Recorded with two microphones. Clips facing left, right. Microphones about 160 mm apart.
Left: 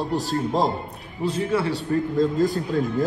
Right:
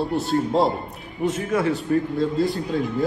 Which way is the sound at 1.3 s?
35° left (ahead or behind).